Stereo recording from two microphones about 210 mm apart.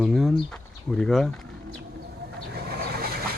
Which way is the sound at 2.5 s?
45° right (ahead or behind).